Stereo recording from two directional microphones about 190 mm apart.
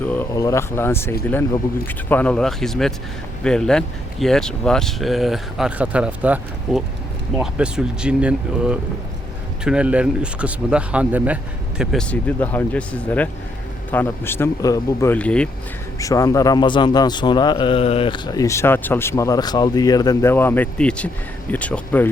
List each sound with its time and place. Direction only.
0.0 s speech: 10° left (ahead or behind)
16.0 s a man's voice: 15° left (ahead or behind)